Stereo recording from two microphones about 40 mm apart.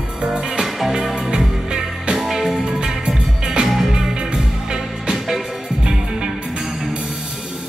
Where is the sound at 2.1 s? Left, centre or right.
Centre.